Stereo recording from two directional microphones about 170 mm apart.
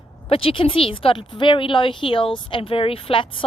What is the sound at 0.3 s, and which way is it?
Speech, 30° left (ahead or behind).